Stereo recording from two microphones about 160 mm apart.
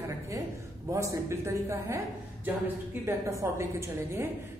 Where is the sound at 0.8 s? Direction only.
20° right (ahead or behind).